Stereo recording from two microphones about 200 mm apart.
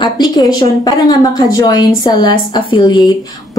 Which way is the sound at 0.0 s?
20° left (ahead or behind).